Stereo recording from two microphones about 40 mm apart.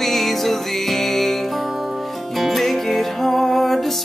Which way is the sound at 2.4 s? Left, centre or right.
Centre.